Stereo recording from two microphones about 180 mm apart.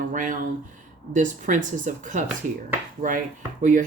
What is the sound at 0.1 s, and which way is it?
Speech, 45° right (ahead or behind).